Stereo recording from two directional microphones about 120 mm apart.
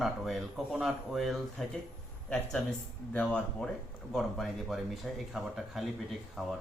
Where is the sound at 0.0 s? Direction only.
Centre (ahead or behind).